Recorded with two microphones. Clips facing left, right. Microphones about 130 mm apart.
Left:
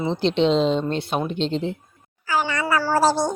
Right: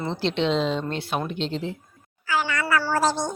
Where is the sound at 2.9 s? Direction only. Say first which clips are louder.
Left 7 dB; 35° left (ahead or behind).